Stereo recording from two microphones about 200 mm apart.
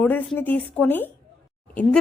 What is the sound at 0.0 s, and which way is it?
A woman's voice, 5° left (ahead or behind).